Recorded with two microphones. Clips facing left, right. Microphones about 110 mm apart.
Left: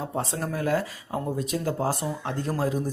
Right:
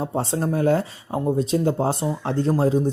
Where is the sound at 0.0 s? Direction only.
30° right (ahead or behind).